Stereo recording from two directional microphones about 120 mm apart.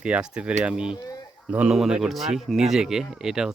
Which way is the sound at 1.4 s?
10° right (ahead or behind).